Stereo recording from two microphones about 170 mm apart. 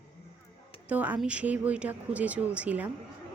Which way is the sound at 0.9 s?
10° right (ahead or behind).